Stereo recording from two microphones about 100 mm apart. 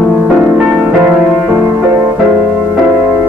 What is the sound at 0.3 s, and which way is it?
Music, 10° right (ahead or behind).